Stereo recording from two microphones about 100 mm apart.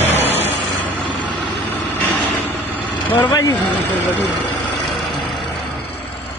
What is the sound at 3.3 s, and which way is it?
Speech, 40° left (ahead or behind).